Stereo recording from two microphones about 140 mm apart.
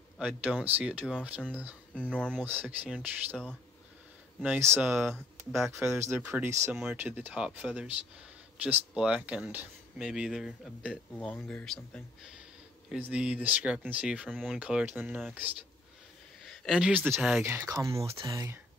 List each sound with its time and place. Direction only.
0.2 s speech: 10° right (ahead or behind)
2.0 s speech: 5° left (ahead or behind)
2.4 s speech: 15° right (ahead or behind)
4.4 s speech: 15° right (ahead or behind)
6.7 s speech: 5° right (ahead or behind)
11.1 s speech: 5° left (ahead or behind)
17.4 s speech: 20° right (ahead or behind)